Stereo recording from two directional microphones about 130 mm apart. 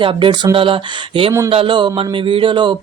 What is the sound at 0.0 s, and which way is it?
A man's voice, 40° right (ahead or behind).